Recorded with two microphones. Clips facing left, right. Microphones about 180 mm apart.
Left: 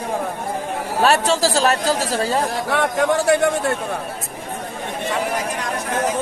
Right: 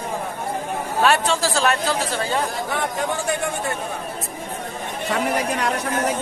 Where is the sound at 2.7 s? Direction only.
70° left (ahead or behind).